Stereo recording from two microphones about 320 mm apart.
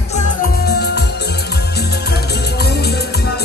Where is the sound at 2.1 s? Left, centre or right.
Left.